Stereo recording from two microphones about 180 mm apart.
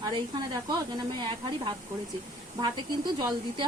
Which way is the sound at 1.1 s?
25° right (ahead or behind).